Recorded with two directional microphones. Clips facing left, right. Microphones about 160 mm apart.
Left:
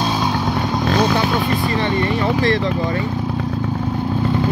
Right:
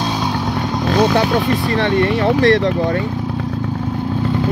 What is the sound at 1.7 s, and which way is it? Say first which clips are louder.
Speech: right 3 dB; 75° right (ahead or behind).